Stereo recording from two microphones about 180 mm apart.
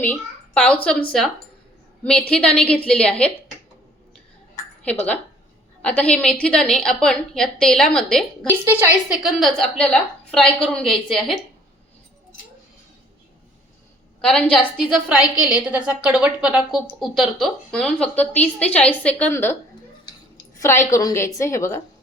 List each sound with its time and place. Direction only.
0.0 s a woman's voice: 10° left (ahead or behind)
2.0 s a woman's voice: 5° left (ahead or behind)
4.9 s a woman's voice: 5° left (ahead or behind)
14.2 s a woman's voice: 5° left (ahead or behind)